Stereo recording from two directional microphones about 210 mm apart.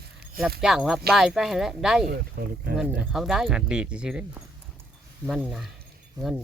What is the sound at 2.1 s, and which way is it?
Speech, 50° right (ahead or behind).